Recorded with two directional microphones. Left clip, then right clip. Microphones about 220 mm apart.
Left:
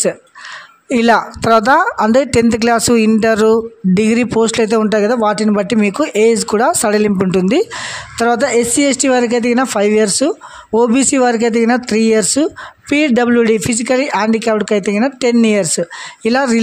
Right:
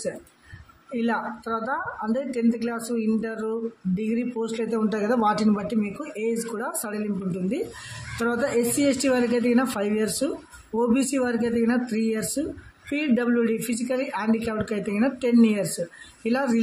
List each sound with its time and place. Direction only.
0.9 s a woman's voice: 45° left (ahead or behind)